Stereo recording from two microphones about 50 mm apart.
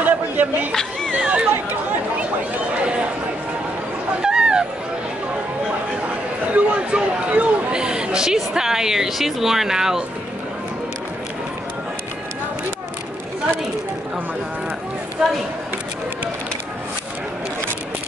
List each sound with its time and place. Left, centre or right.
0.0 s chatter: right
1.2 s speech: right
1.5 s speech: right
4.2 s chatter: centre
6.5 s a sound: right; by 10.0 s centre
15.2 s speech: centre